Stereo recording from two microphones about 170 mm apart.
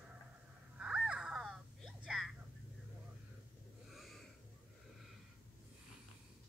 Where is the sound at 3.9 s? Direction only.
Centre (ahead or behind).